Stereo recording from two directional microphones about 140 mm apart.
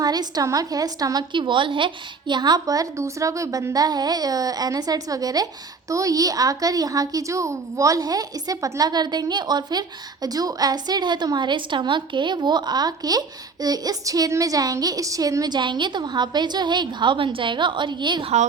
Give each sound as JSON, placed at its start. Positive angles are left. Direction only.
{"t": 0.0, "sound": "a woman's voice", "side_deg": -30}